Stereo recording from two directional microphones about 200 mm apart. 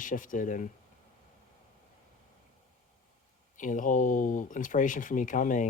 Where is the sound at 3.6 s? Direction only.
40° left (ahead or behind).